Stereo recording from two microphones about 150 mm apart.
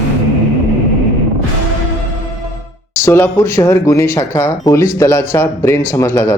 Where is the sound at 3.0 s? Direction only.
20° left (ahead or behind).